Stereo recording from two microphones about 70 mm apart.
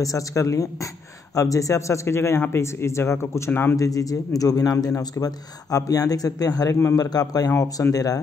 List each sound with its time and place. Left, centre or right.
0.0 s speech: left
3.7 s speech: left
4.9 s speech: left